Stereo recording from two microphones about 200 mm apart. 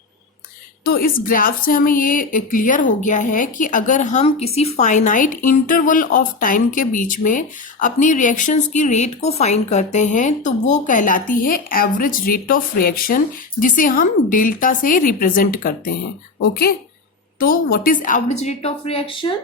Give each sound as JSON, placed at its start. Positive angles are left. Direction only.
{"t": 0.9, "sound": "speech", "side_deg": 45}